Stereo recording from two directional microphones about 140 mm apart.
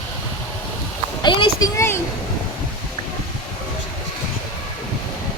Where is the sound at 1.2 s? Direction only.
35° left (ahead or behind).